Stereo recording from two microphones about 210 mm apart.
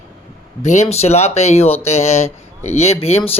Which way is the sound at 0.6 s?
30° left (ahead or behind).